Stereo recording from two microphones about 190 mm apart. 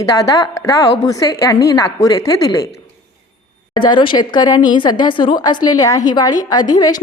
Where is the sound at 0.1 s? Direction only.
15° left (ahead or behind).